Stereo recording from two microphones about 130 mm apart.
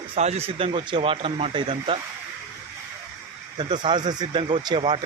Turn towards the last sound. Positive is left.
turn(degrees=-35)  # may be behind; listen again after turning